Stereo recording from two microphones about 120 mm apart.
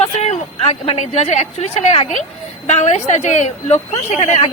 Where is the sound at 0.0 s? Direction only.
60° left (ahead or behind).